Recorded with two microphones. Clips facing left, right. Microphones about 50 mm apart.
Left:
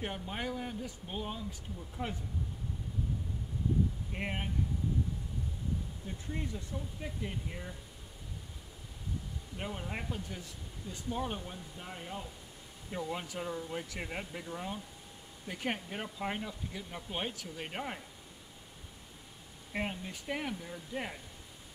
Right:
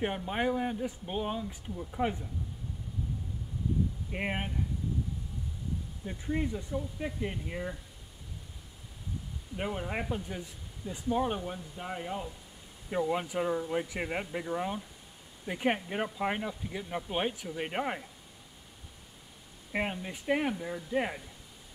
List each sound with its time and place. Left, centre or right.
0.0 s speech: right
4.1 s speech: right
6.0 s speech: right
9.6 s speech: right
19.7 s speech: right